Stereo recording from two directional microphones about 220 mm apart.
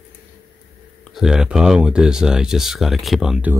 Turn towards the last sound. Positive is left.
turn(degrees=0)  # may be behind; listen again after turning